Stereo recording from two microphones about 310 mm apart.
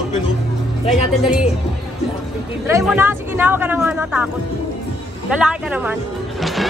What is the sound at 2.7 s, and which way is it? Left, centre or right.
Speech, centre.